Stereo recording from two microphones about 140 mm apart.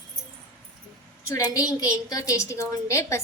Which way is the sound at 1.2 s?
25° left (ahead or behind).